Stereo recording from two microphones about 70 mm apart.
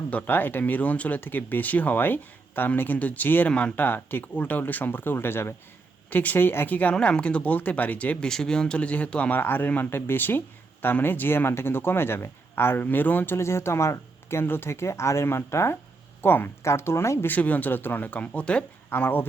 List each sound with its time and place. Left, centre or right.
0.1 s speech: left
3.5 s speech: centre
3.8 s speech: left
9.4 s speech: left
17.2 s speech: left
18.9 s speech: left